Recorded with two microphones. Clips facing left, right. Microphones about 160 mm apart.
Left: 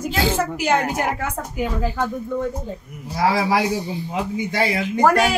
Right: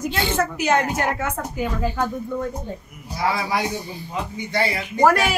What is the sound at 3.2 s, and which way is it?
A man's voice, 90° left.